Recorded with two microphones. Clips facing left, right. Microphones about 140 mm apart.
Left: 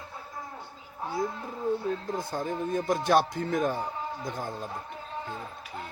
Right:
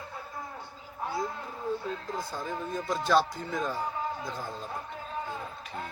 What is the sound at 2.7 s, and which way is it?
Speech, 50° left (ahead or behind).